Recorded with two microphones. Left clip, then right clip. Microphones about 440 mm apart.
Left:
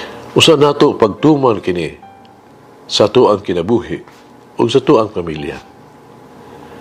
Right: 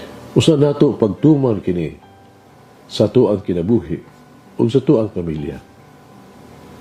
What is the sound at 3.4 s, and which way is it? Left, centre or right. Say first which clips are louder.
Speech: left 3 dB; left.